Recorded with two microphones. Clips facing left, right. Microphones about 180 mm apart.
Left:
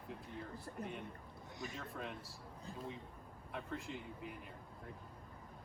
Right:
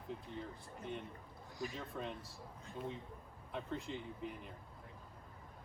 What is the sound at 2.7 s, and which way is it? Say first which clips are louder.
Speech: right 2 dB; 35° left (ahead or behind).